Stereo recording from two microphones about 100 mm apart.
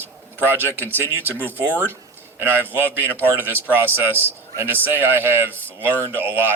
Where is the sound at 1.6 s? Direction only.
20° right (ahead or behind).